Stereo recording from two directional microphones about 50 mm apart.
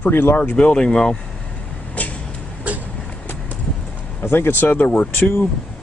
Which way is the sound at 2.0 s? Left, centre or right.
Left.